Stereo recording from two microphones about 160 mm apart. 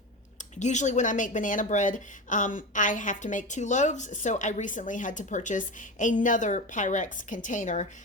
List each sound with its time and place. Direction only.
0.6 s a woman's voice: 50° left (ahead or behind)